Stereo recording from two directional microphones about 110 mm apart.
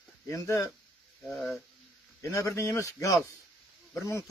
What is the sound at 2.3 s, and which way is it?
Speech, 30° left (ahead or behind).